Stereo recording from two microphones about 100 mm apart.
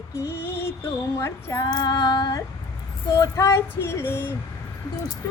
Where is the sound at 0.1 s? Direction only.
25° left (ahead or behind).